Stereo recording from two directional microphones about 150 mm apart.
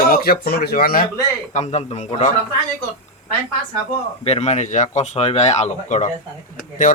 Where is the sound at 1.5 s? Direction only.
50° left (ahead or behind).